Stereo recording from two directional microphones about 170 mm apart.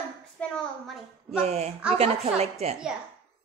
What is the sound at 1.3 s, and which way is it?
Speech, 40° right (ahead or behind).